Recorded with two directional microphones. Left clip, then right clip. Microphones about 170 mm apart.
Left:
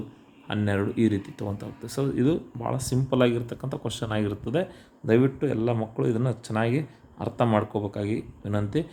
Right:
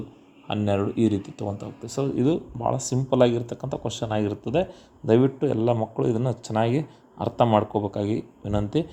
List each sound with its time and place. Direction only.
0.4 s speech: 10° right (ahead or behind)